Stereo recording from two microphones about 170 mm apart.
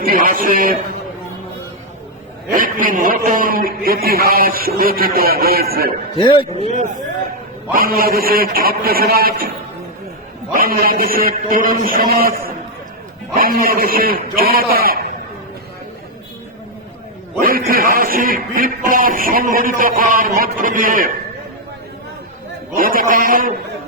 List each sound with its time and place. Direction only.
0.0 s a sound: 55° right (ahead or behind)
2.5 s music: 55° right (ahead or behind)
6.1 s a man's voice: 30° left (ahead or behind)
7.7 s music: 60° right (ahead or behind)
10.5 s music: 60° right (ahead or behind)
17.4 s music: 60° right (ahead or behind)
22.7 s music: 55° right (ahead or behind)